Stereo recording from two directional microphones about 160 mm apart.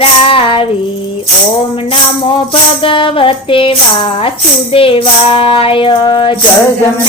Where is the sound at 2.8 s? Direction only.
35° left (ahead or behind).